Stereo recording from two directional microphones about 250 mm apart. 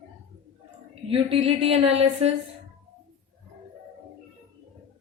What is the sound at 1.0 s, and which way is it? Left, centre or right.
Speech, right.